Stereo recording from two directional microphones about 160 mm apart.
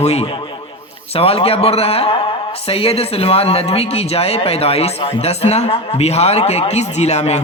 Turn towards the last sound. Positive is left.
turn(degrees=45)  # may be behind; listen again after turning